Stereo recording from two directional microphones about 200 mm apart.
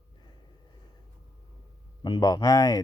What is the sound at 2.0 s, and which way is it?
Speech, 20° left (ahead or behind).